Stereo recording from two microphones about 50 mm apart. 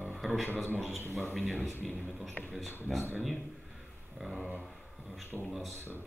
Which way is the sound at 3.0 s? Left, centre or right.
Right.